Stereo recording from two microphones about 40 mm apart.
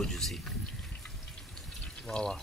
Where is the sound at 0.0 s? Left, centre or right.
Centre.